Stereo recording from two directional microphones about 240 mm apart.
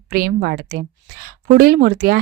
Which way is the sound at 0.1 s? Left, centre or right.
Right.